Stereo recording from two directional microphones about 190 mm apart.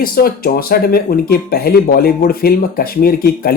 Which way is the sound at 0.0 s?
50° left (ahead or behind).